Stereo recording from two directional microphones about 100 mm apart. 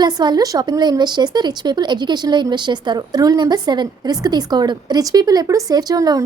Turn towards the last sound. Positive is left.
turn(degrees=-35)  # may be behind; listen again after turning